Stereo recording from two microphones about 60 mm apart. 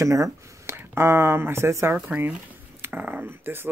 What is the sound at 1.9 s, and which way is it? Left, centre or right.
Speech, right.